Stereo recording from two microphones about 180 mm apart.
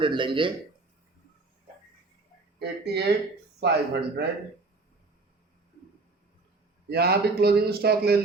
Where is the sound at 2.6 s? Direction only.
65° right (ahead or behind).